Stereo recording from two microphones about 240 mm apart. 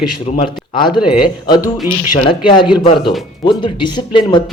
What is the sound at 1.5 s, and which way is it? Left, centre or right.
Speech, centre.